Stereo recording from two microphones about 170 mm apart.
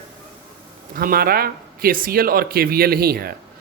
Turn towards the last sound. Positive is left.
turn(degrees=-65)  # may be behind; listen again after turning